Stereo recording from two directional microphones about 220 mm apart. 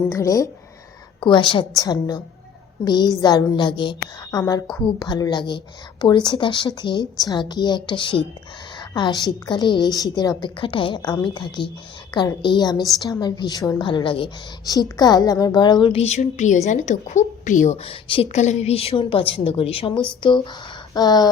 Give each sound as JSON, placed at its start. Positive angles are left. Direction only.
{"t": 0.1, "sound": "a woman's voice", "side_deg": 15}